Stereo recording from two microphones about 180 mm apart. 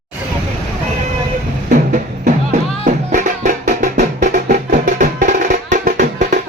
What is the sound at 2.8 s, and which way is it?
Music, 45° right (ahead or behind).